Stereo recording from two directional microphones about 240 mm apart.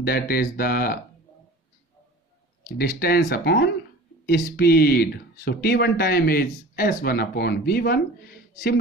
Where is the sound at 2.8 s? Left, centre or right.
Left.